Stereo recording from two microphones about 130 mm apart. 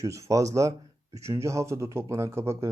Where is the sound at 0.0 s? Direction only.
25° right (ahead or behind).